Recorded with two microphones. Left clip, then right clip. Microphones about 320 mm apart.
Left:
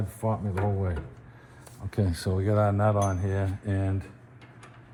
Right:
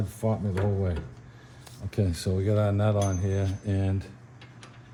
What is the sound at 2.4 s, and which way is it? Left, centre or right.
Mantra, centre.